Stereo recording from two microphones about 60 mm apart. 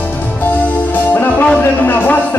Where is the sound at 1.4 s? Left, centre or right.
Left.